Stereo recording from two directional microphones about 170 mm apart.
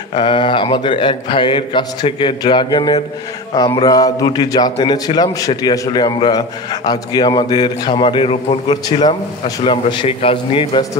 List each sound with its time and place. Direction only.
0.1 s a man's voice: 30° left (ahead or behind)